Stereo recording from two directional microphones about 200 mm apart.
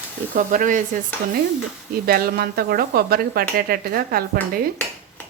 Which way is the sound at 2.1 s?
50° right (ahead or behind).